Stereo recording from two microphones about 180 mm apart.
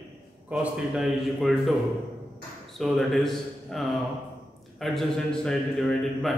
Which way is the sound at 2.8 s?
Centre (ahead or behind).